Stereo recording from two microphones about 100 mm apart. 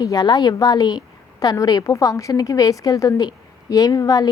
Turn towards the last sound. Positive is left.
turn(degrees=40)  # may be behind; listen again after turning